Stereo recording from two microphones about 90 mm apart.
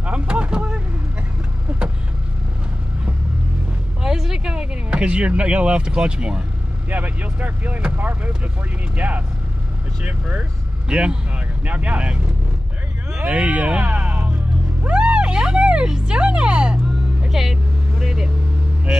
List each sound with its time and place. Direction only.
0.0 s vehicle: 15° right (ahead or behind)
4.0 s a sound: 5° right (ahead or behind)
6.9 s speech: 20° right (ahead or behind)
13.2 s speech: 15° right (ahead or behind)
14.8 s music: 15° right (ahead or behind)